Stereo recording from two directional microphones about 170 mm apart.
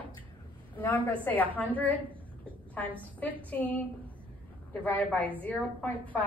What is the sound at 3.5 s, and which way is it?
Speech, 10° left (ahead or behind).